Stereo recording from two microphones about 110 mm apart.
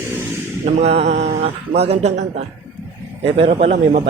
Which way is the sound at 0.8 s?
75° right (ahead or behind).